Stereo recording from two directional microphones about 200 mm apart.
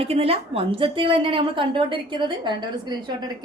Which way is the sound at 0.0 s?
30° right (ahead or behind).